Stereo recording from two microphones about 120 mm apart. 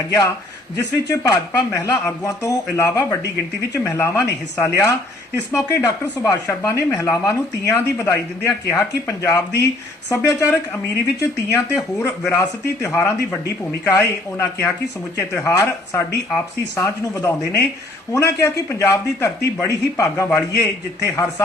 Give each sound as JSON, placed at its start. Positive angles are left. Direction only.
{"t": 0.8, "sound": "a man's voice", "side_deg": 25}
{"t": 3.8, "sound": "a man's voice", "side_deg": 20}